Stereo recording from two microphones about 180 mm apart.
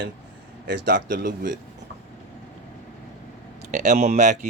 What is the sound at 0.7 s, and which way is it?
Speech, 75° right (ahead or behind).